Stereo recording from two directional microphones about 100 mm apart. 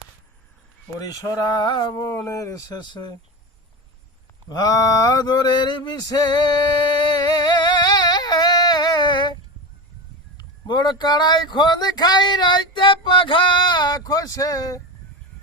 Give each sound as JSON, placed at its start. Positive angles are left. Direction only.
{"t": 1.0, "sound": "speech", "side_deg": 45}
{"t": 2.0, "sound": "speech", "side_deg": 30}
{"t": 2.8, "sound": "speech", "side_deg": 45}
{"t": 4.4, "sound": "speech", "side_deg": 40}
{"t": 6.0, "sound": "singing", "side_deg": 40}
{"t": 10.3, "sound": "speech", "side_deg": 45}